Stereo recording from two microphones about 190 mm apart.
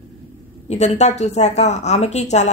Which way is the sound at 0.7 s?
35° left (ahead or behind).